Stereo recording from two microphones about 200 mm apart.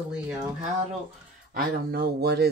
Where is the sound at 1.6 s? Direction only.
50° right (ahead or behind).